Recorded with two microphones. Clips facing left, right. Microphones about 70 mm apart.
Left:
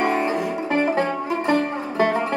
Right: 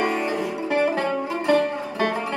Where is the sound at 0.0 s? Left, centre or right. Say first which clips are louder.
Left 2 dB; left.